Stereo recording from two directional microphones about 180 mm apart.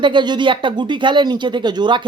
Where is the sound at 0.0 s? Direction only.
25° right (ahead or behind).